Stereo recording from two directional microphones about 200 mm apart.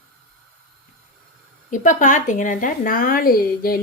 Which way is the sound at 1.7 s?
40° left (ahead or behind).